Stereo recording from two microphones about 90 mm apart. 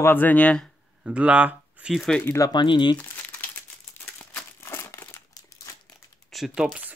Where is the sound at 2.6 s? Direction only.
60° left (ahead or behind).